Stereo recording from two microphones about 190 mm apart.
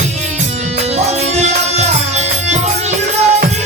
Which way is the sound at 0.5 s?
35° right (ahead or behind).